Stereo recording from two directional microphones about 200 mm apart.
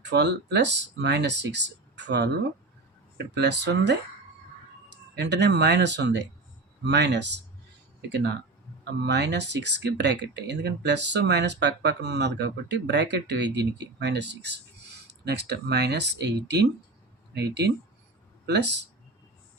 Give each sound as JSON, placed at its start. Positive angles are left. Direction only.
{"t": 0.0, "sound": "speech", "side_deg": -60}
{"t": 3.3, "sound": "speech", "side_deg": -60}
{"t": 8.8, "sound": "speech", "side_deg": -60}